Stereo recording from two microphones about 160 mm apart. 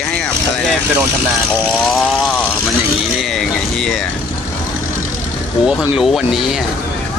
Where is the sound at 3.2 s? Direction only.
5° left (ahead or behind).